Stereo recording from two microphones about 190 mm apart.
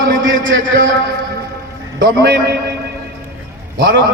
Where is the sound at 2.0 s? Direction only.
55° right (ahead or behind).